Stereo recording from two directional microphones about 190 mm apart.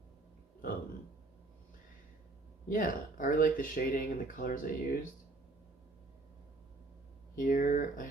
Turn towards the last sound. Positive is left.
turn(degrees=45)  # may be behind; listen again after turning